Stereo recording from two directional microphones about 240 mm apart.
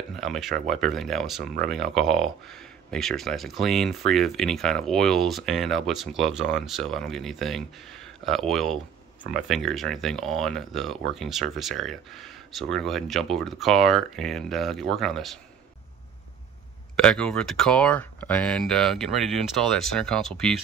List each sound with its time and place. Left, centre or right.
0.1 s speech: centre
1.4 s speech: right
1.7 s speech: centre
16.9 s speech: centre